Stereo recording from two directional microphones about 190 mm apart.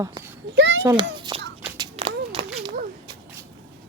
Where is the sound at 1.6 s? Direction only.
25° right (ahead or behind).